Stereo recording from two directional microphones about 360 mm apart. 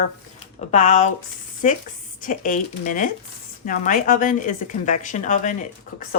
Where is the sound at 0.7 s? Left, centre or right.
Centre.